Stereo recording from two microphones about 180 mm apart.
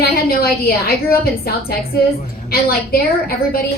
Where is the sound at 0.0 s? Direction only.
55° left (ahead or behind).